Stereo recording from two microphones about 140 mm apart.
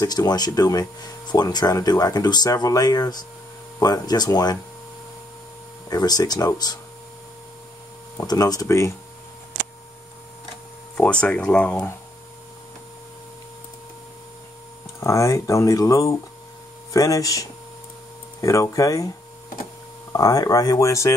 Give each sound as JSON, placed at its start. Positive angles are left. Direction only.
{"t": 0.0, "sound": "speech", "side_deg": 25}
{"t": 5.9, "sound": "speech", "side_deg": 30}
{"t": 8.2, "sound": "speech", "side_deg": 25}
{"t": 11.0, "sound": "speech", "side_deg": 10}
{"t": 15.0, "sound": "speech", "side_deg": 20}
{"t": 20.1, "sound": "speech", "side_deg": 25}